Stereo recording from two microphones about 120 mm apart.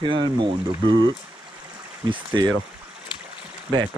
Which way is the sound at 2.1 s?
40° right (ahead or behind).